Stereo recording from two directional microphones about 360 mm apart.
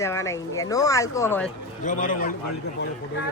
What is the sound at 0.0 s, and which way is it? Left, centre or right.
A man's voice, centre.